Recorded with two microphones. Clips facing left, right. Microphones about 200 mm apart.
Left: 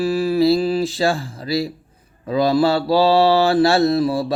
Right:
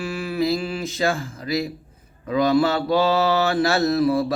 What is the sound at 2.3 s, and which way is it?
Mantra, 30° left (ahead or behind).